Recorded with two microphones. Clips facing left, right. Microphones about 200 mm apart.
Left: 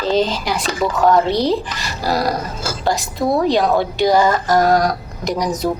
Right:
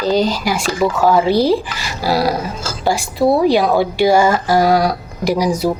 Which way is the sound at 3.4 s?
10° right (ahead or behind).